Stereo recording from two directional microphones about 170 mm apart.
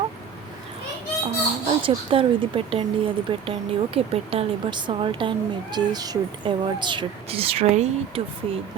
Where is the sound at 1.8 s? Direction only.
30° right (ahead or behind).